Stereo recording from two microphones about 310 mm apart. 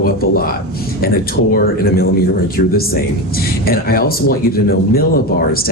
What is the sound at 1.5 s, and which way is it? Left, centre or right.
Speech, left.